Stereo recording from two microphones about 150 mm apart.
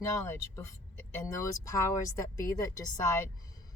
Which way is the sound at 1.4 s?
20° left (ahead or behind).